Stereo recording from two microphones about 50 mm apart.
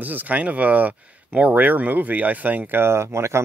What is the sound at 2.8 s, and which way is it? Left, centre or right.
Speech, right.